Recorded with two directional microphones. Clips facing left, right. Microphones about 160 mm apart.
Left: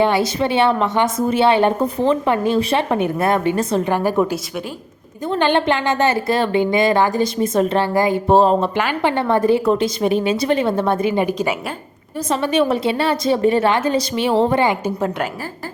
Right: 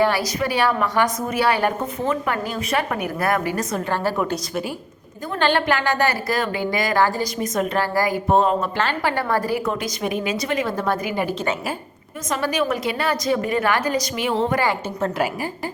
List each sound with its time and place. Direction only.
0.0 s a woman's voice: 25° left (ahead or behind)
3.8 s a woman's voice: 15° left (ahead or behind)
5.3 s a woman's voice: 20° left (ahead or behind)
8.7 s a woman's voice: 15° left (ahead or behind)
12.3 s a woman's voice: 25° left (ahead or behind)